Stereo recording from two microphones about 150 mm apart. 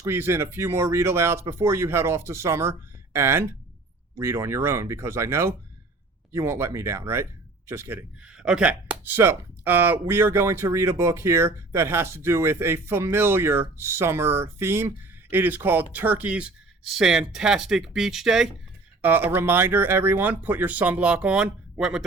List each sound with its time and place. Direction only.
0.0 s speech: 15° right (ahead or behind)